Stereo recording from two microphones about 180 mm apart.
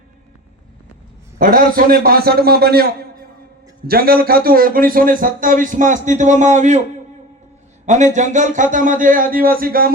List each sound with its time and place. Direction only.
1.4 s a man's voice: 55° right (ahead or behind)
7.9 s a man's voice: 40° right (ahead or behind)